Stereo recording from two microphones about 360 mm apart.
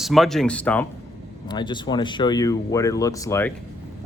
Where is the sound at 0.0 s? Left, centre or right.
Centre.